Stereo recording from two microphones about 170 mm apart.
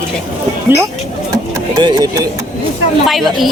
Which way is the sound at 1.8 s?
25° right (ahead or behind).